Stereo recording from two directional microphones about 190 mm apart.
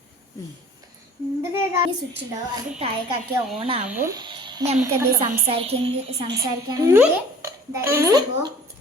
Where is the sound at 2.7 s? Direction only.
30° right (ahead or behind).